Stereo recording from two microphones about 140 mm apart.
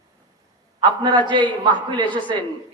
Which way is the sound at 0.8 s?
35° right (ahead or behind).